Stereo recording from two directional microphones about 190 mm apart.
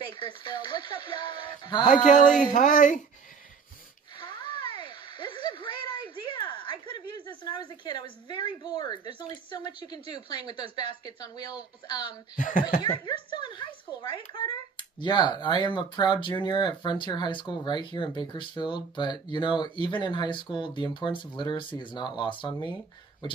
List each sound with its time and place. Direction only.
0.3 s speech: 25° left (ahead or behind)
2.0 s a woman's voice: 40° left (ahead or behind)
4.2 s a sound: 25° left (ahead or behind)
9.3 s speech: 25° left (ahead or behind)
12.4 s a woman's voice: 45° left (ahead or behind)
13.0 s speech: 25° left (ahead or behind)